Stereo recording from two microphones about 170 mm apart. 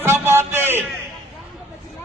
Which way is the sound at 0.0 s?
15° right (ahead or behind).